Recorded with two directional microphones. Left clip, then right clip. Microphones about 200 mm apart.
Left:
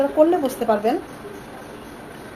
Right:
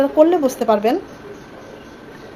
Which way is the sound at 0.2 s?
40° right (ahead or behind).